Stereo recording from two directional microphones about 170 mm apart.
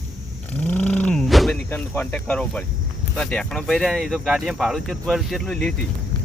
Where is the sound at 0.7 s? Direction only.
10° left (ahead or behind).